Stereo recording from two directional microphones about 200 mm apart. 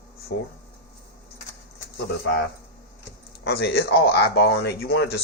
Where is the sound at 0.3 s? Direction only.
55° left (ahead or behind).